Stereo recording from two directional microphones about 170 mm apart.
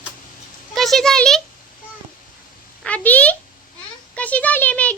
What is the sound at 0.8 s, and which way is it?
Speech, centre (ahead or behind).